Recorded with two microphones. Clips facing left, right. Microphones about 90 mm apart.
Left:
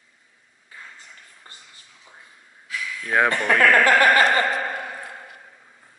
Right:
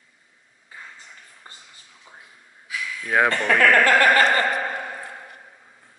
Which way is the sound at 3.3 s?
10° left (ahead or behind).